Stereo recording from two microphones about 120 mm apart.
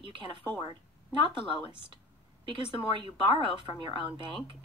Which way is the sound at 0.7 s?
40° right (ahead or behind).